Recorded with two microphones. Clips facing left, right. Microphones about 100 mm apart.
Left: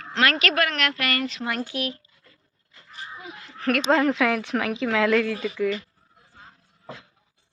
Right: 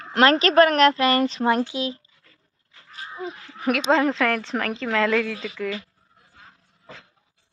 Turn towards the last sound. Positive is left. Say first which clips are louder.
# left 2 dB
turn(degrees=5)  # may be behind; listen again after turning